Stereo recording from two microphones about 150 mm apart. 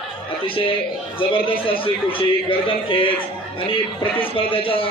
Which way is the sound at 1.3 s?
35° left (ahead or behind).